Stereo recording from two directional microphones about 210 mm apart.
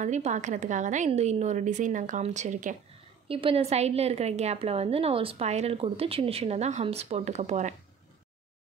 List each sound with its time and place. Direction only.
0.0 s a woman's voice: 35° right (ahead or behind)
3.3 s a woman's voice: 25° right (ahead or behind)